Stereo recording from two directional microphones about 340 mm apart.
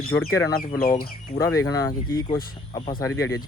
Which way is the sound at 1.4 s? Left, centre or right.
Centre.